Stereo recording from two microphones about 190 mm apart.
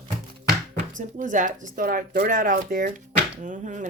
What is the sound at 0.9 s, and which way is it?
Speech, 40° right (ahead or behind).